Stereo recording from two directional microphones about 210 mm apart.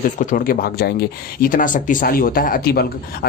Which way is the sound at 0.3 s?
45° left (ahead or behind).